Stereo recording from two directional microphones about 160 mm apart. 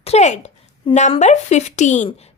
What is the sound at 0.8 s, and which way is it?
Speech, 30° left (ahead or behind).